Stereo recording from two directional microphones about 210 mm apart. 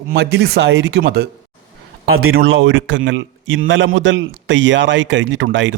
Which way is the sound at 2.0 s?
80° right.